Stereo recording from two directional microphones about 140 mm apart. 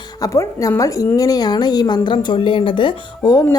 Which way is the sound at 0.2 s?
25° left (ahead or behind).